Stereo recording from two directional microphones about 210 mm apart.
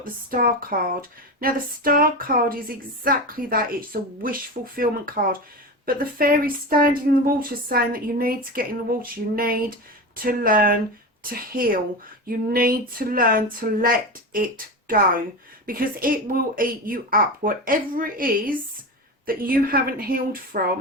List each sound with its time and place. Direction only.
0.0 s speech: 40° right (ahead or behind)